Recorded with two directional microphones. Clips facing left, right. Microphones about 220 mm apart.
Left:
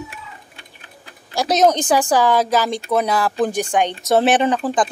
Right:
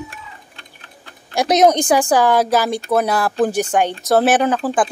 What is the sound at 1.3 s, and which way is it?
Speech, 15° right (ahead or behind).